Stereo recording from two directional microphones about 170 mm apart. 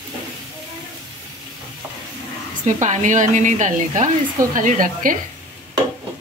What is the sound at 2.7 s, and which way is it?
Speech, 45° right (ahead or behind).